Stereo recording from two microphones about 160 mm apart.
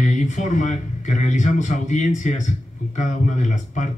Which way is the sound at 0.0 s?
50° left (ahead or behind).